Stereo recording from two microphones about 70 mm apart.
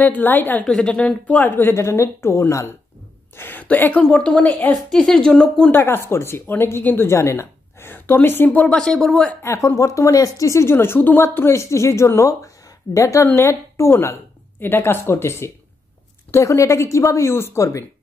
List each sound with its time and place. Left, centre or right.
0.0 s a woman's voice: left
0.7 s speech: centre; by 1.8 s left
1.8 s speech: left
3.3 s a woman's voice: left
4.0 s speech: centre
5.7 s a woman's voice: left
7.1 s a woman's voice: left
8.5 s speech: centre
9.4 s a woman's voice: left
14.6 s speech: left
17.3 s speech: left